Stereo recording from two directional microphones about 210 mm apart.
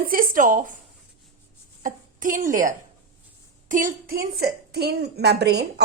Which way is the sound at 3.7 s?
40° right (ahead or behind).